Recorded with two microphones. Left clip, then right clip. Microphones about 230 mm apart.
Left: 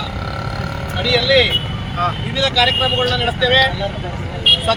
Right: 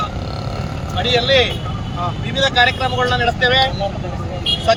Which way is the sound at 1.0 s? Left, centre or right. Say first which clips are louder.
Even; centre.